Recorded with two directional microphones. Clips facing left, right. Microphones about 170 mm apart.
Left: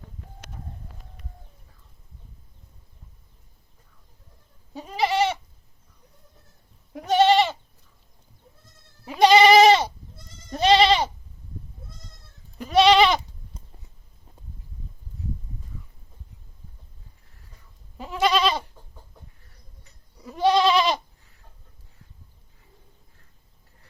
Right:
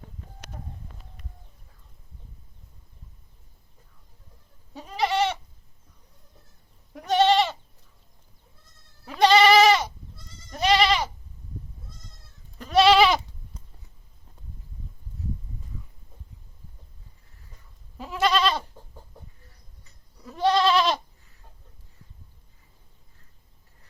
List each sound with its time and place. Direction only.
4.7 s goat: centre (ahead or behind)
7.1 s goat: centre (ahead or behind)
9.0 s goat: 15° left (ahead or behind)
12.5 s goat: centre (ahead or behind)
17.9 s goat: centre (ahead or behind)
20.2 s goat: centre (ahead or behind)